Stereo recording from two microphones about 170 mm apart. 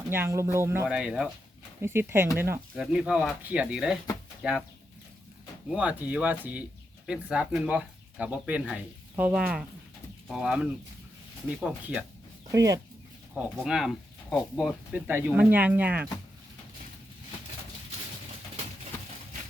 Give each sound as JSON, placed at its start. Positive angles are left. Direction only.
{"t": 0.1, "sound": "speech", "side_deg": -15}
{"t": 2.7, "sound": "speech", "side_deg": -5}
{"t": 5.6, "sound": "speech", "side_deg": -5}
{"t": 12.5, "sound": "speech", "side_deg": -20}
{"t": 13.3, "sound": "speech", "side_deg": -5}
{"t": 14.9, "sound": "speech", "side_deg": -10}